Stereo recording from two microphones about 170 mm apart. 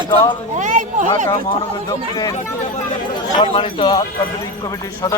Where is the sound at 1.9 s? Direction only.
20° left (ahead or behind).